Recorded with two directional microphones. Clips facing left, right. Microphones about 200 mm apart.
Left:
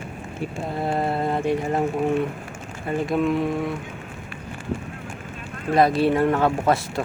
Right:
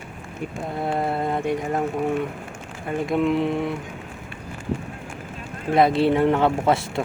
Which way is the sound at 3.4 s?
25° right (ahead or behind).